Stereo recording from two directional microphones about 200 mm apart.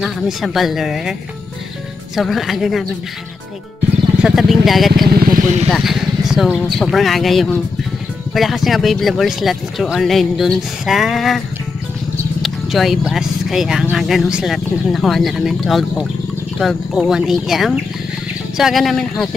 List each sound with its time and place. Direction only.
0.0 s speech: centre (ahead or behind)
2.1 s speech: centre (ahead or behind)
4.2 s speech: centre (ahead or behind)
5.0 s speech: 50° right (ahead or behind)
5.7 s speech: centre (ahead or behind)